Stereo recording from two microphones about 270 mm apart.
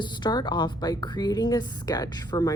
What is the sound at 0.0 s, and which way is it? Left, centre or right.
A woman's voice, centre.